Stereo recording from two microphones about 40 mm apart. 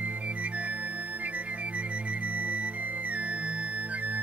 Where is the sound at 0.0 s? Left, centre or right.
Right.